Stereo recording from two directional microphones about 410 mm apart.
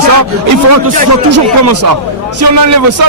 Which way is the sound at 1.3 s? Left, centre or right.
Right.